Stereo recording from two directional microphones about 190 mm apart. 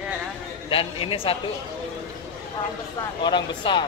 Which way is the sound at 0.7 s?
30° left (ahead or behind).